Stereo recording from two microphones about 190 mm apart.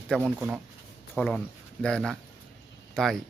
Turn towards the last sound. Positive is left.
turn(degrees=5)  # may be behind; listen again after turning